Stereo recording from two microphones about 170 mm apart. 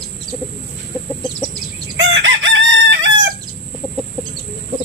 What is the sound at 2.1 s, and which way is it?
Chicken, 90° right.